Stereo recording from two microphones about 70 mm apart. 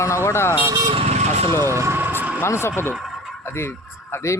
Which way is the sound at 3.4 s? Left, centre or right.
Left.